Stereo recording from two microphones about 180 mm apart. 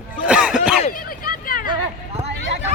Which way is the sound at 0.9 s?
50° left (ahead or behind).